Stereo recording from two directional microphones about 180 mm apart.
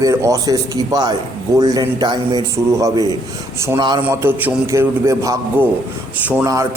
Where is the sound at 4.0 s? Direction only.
10° right (ahead or behind).